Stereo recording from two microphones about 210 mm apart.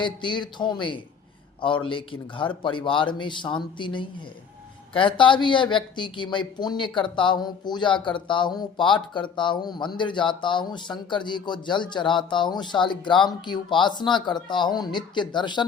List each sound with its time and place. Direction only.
0.0 s a woman's voice: 20° left (ahead or behind)